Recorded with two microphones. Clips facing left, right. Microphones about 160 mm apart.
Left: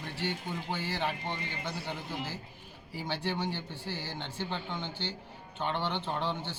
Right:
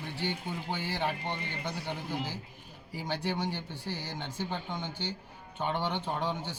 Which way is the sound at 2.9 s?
10° right (ahead or behind).